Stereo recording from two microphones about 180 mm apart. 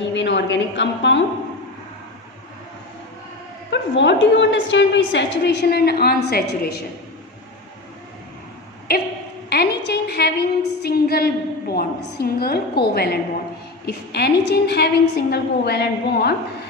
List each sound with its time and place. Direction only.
0.0 s a woman's voice: 85° left
3.7 s a woman's voice: 75° left (ahead or behind)
8.9 s a woman's voice: 60° left (ahead or behind)